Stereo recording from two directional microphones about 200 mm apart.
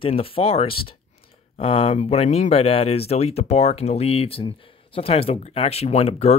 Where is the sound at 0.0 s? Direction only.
30° left (ahead or behind).